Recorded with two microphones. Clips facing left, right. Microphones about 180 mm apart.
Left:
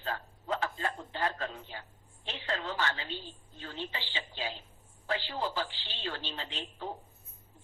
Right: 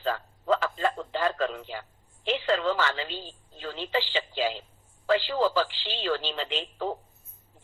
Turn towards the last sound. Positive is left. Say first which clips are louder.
# right 9 dB
turn(degrees=-90)